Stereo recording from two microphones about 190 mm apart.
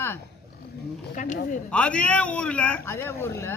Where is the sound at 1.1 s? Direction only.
40° left (ahead or behind).